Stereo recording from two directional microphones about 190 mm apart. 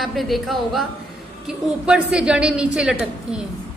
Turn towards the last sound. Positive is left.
turn(degrees=-5)  # may be behind; listen again after turning